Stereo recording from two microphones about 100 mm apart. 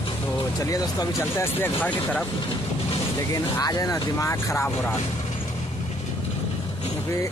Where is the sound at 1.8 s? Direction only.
15° left (ahead or behind).